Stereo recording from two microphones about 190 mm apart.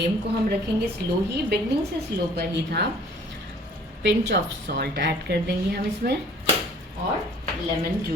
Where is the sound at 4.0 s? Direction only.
65° right (ahead or behind).